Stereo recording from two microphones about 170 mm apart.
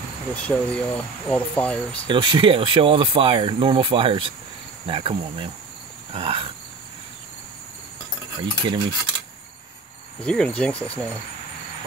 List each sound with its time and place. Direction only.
0.3 s speech: 10° left (ahead or behind)
2.0 s speech: 30° right (ahead or behind)
8.4 s stir: 30° right (ahead or behind)
10.2 s speech: 5° left (ahead or behind)